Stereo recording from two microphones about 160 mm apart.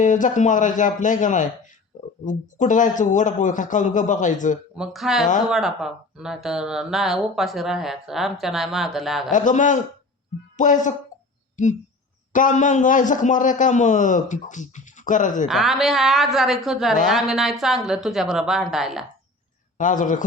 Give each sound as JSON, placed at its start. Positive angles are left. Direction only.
{"t": 0.0, "sound": "a man's voice", "side_deg": 55}
{"t": 4.7, "sound": "speech", "side_deg": -5}
{"t": 9.3, "sound": "a man's voice", "side_deg": 55}
{"t": 15.4, "sound": "speech", "side_deg": 0}
{"t": 19.8, "sound": "a man's voice", "side_deg": 55}